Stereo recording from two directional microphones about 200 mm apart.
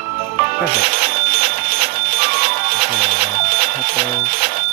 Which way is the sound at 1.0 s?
50° right (ahead or behind).